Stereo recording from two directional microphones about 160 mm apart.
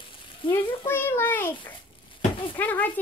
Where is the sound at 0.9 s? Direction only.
15° left (ahead or behind).